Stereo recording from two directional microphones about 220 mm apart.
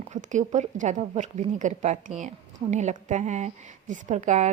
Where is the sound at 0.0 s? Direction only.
35° right (ahead or behind).